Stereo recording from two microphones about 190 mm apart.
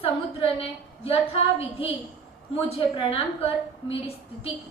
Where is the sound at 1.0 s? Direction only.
30° left (ahead or behind).